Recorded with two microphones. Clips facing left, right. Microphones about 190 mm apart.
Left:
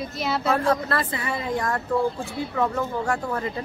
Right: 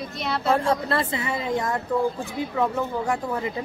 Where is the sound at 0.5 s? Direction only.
25° right (ahead or behind).